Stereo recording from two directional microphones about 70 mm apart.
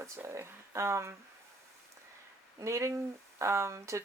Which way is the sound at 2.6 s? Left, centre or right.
Right.